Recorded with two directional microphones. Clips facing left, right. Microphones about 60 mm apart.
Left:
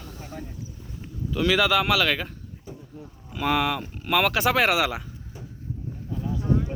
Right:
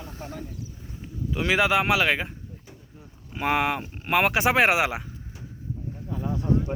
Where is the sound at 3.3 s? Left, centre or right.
Right.